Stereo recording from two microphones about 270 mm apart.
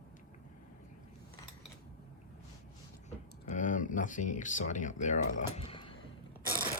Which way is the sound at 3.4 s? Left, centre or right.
Left.